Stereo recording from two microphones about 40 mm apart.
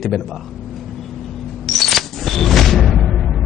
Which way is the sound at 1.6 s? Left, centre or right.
Centre.